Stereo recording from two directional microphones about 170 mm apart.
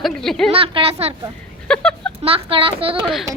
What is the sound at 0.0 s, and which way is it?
Speech, centre (ahead or behind).